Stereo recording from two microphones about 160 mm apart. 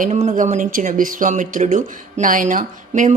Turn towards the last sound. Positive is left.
turn(degrees=-50)  # may be behind; listen again after turning